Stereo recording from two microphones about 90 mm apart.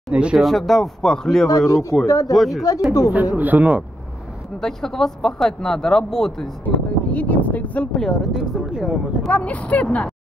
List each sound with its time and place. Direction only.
0.1 s speech: 10° right (ahead or behind)
0.4 s speech: centre (ahead or behind)
1.7 s speech: 35° left (ahead or behind)
2.3 s speech: centre (ahead or behind)
3.1 s speech: 15° right (ahead or behind)
4.6 s speech: 5° left (ahead or behind)
7.2 s speech: 15° left (ahead or behind); by 9.3 s 5° right (ahead or behind)
9.3 s speech: 15° left (ahead or behind)